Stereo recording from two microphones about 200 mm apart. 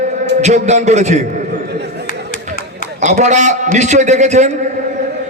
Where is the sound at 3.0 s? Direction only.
35° right (ahead or behind).